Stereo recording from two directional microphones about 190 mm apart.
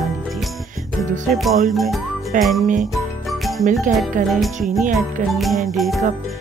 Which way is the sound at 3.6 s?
40° right (ahead or behind).